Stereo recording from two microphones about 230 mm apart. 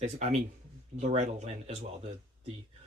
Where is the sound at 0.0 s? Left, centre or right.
Right.